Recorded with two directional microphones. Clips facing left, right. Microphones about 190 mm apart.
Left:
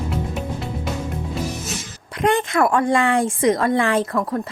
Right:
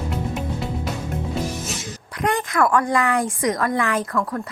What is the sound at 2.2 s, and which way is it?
A woman's voice, 25° left (ahead or behind).